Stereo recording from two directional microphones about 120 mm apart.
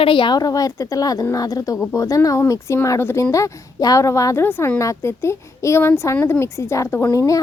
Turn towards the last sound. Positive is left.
turn(degrees=25)  # may be behind; listen again after turning